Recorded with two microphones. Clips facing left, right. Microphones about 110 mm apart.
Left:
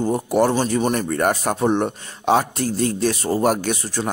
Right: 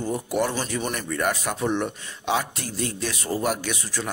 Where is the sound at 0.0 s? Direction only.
35° left (ahead or behind).